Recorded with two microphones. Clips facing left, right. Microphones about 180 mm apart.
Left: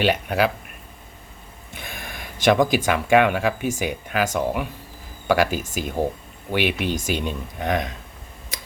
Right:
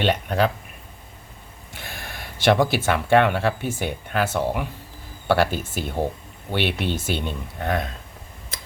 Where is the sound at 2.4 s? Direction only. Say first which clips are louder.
Left 1 dB; 15° left (ahead or behind).